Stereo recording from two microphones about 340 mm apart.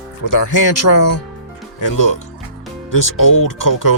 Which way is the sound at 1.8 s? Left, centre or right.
Left.